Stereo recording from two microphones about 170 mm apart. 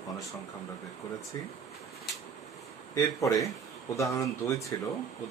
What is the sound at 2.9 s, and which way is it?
Speech, 20° left (ahead or behind).